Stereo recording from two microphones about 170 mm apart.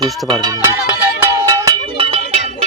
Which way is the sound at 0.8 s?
20° right (ahead or behind).